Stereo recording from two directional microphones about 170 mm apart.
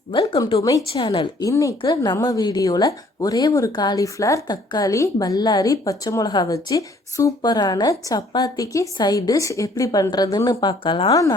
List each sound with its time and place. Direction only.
0.1 s a woman's voice: 25° left (ahead or behind)